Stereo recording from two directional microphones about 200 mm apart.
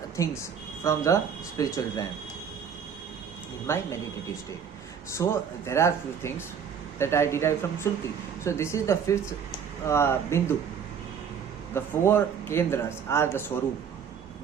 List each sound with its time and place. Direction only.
0.2 s speech: 15° left (ahead or behind)
3.7 s speech: 15° left (ahead or behind)
5.1 s speech: 15° left (ahead or behind)
11.7 s speech: 10° left (ahead or behind)